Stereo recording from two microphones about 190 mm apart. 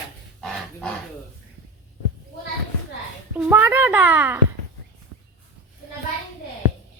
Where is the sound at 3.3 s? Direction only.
10° right (ahead or behind).